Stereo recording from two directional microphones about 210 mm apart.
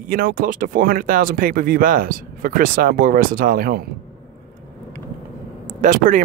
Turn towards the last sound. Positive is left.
turn(degrees=-40)  # may be behind; listen again after turning